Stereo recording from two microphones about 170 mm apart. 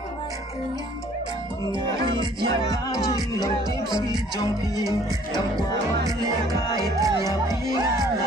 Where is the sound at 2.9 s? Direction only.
20° left (ahead or behind).